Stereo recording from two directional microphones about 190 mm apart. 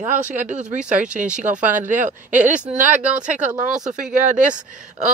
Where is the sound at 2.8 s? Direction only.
10° right (ahead or behind).